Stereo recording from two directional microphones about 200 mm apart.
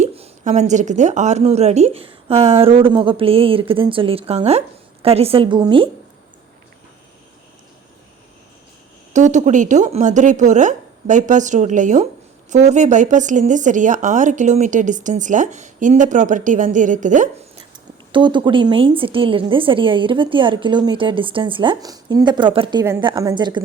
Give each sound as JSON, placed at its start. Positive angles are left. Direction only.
{"t": 0.0, "sound": "a woman's voice", "side_deg": -35}
{"t": 9.1, "sound": "a woman's voice", "side_deg": -35}
{"t": 18.1, "sound": "a woman's voice", "side_deg": -25}